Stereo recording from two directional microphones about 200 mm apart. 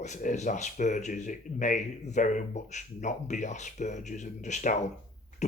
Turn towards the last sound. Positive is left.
turn(degrees=35)  # may be behind; listen again after turning